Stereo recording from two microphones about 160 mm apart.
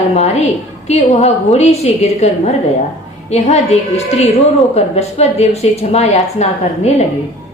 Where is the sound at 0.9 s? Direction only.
45° left (ahead or behind).